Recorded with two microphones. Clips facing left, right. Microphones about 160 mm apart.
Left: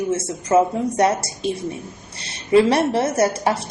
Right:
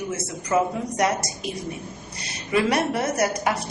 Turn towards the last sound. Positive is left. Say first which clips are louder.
# left 4 dB
turn(degrees=30)  # may be behind; listen again after turning